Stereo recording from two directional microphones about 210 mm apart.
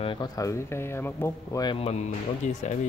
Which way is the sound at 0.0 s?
20° left (ahead or behind).